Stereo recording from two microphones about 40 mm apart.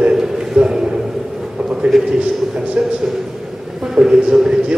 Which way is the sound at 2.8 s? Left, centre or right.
Right.